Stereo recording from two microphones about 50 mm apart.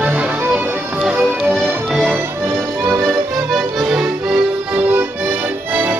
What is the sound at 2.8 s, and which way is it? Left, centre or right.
Music, right.